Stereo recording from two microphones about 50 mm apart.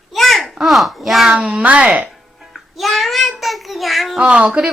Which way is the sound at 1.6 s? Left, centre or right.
Right.